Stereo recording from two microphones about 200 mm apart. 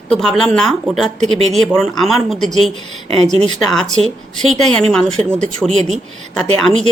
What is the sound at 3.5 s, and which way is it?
Speech, centre (ahead or behind).